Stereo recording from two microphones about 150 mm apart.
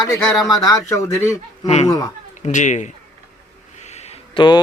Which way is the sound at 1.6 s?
45° left (ahead or behind).